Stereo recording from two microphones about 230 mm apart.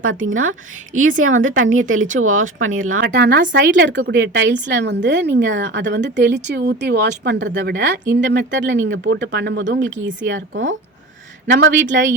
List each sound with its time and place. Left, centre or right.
0.0 s a woman's voice: right
3.0 s speech: right